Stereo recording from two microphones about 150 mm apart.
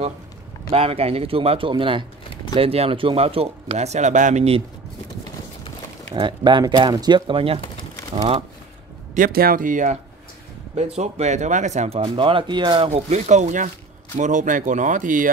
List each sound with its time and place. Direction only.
0.7 s speech: 40° right (ahead or behind)
6.1 s speech: 30° right (ahead or behind)
9.1 s speech: 80° right; by 9.9 s 60° right (ahead or behind)
10.8 s speech: 45° right (ahead or behind)
12.0 s speech: 35° right (ahead or behind); by 15.2 s 60° right (ahead or behind)